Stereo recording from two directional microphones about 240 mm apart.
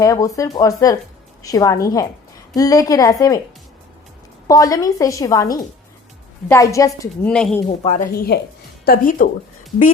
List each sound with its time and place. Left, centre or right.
0.0 s a woman's voice: centre
4.4 s a woman's voice: centre
7.3 s speech: centre
8.0 s a woman's voice: left